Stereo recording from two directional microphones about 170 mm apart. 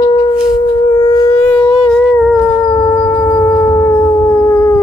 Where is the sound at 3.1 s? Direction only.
25° left (ahead or behind).